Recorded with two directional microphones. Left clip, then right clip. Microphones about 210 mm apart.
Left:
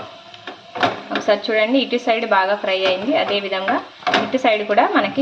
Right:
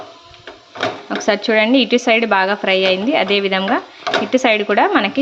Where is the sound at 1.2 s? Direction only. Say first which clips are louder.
Right 3 dB; 40° right (ahead or behind).